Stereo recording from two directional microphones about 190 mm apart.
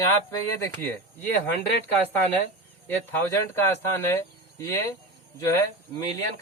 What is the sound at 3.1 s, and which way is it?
Speech, 15° left (ahead or behind).